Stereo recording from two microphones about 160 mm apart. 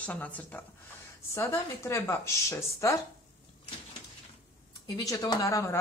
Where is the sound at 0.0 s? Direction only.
10° left (ahead or behind).